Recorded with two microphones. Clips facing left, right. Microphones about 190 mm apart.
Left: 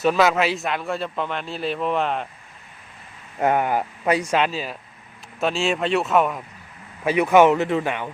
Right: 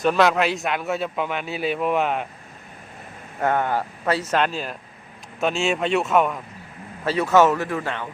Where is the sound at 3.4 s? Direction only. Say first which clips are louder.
Left 2 dB; 15° left (ahead or behind).